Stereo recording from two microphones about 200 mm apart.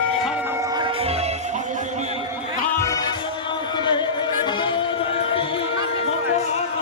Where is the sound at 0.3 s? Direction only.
10° right (ahead or behind); by 2.2 s 35° right (ahead or behind).